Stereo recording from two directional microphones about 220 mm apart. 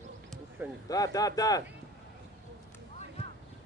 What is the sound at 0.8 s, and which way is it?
Speech, 15° left (ahead or behind).